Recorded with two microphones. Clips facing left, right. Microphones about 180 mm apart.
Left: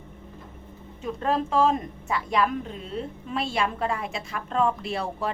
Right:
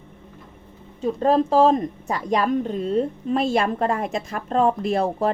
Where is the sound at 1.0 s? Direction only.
35° right (ahead or behind).